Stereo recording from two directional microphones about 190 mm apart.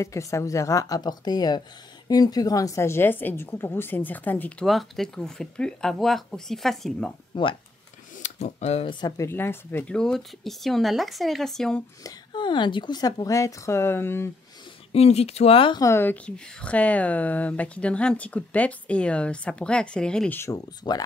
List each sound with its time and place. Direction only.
0.0 s speech: 15° left (ahead or behind)
7.3 s speech: 25° left (ahead or behind)
8.2 s speech: 35° left (ahead or behind)
9.0 s speech: 15° left (ahead or behind)
12.0 s a woman's voice: 25° left (ahead or behind)
14.9 s speech: 35° left (ahead or behind)